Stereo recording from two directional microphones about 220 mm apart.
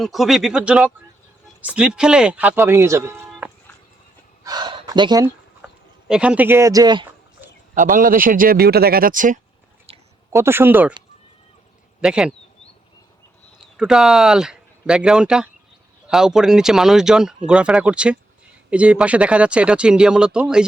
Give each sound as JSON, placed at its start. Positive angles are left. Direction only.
{"t": 0.0, "sound": "speech", "side_deg": 0}
{"t": 3.4, "sound": "music", "side_deg": -10}
{"t": 4.4, "sound": "a sound", "side_deg": -20}
{"t": 5.6, "sound": "speech", "side_deg": -5}
{"t": 7.8, "sound": "speech", "side_deg": -35}
{"t": 10.3, "sound": "speech", "side_deg": -10}
{"t": 11.9, "sound": "a man's voice", "side_deg": -5}
{"t": 13.7, "sound": "speech", "side_deg": -5}